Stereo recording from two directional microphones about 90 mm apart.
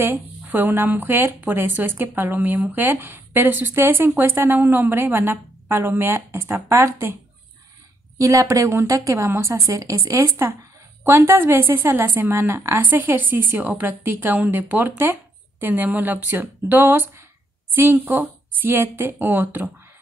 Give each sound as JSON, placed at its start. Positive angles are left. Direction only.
{"t": 0.0, "sound": "speech", "side_deg": -20}
{"t": 8.2, "sound": "speech", "side_deg": -35}